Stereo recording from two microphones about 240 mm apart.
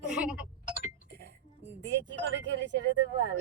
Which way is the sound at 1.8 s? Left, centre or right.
Right.